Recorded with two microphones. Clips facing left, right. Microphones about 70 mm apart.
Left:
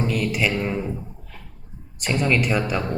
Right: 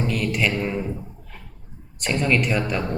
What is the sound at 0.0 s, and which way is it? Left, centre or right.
Speech, centre.